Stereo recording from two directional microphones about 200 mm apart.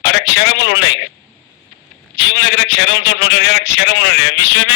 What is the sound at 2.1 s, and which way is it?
A man's voice, 60° left (ahead or behind).